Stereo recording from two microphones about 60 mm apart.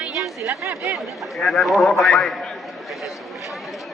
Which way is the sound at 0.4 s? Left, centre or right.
Right.